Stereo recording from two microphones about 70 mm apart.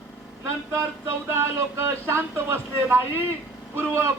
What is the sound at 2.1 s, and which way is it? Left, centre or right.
Speech, right.